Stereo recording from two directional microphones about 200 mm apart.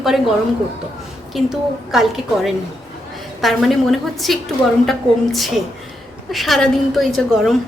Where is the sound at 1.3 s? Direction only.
Centre (ahead or behind).